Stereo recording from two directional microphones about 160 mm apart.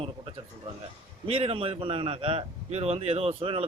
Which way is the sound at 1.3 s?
35° right (ahead or behind).